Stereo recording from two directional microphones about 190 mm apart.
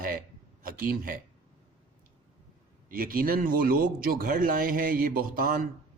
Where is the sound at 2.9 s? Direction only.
50° right (ahead or behind).